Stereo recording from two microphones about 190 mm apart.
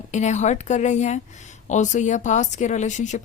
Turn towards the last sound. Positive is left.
turn(degrees=40)  # may be behind; listen again after turning